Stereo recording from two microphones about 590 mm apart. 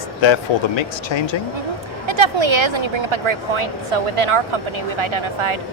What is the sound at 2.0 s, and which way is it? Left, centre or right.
Speech, right.